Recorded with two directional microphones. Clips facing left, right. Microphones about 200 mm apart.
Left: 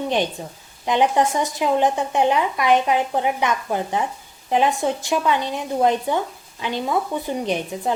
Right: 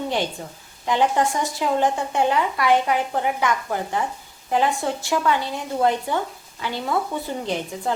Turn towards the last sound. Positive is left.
turn(degrees=20)  # may be behind; listen again after turning